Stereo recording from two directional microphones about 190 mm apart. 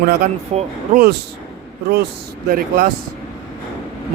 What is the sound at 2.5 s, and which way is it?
Speech, 50° right (ahead or behind).